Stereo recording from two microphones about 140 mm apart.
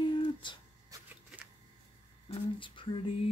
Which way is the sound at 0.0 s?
35° left (ahead or behind).